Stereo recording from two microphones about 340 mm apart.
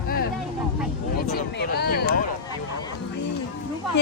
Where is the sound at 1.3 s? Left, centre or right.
Left.